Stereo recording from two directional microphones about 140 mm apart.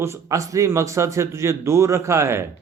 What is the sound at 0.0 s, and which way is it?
Speech, 20° right (ahead or behind).